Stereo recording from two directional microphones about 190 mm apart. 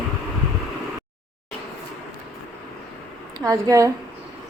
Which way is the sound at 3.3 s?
15° right (ahead or behind).